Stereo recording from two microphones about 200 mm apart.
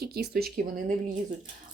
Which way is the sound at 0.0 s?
55° right (ahead or behind).